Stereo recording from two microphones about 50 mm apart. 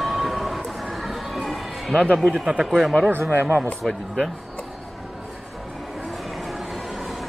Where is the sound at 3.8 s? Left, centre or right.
Centre.